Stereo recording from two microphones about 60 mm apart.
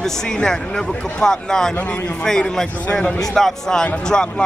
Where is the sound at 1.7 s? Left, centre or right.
Left.